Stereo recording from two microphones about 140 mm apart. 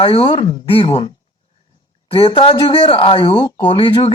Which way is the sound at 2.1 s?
40° left (ahead or behind).